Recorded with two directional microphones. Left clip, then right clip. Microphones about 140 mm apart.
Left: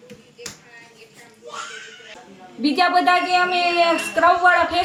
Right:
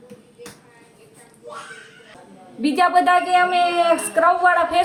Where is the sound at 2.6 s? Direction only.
5° right (ahead or behind).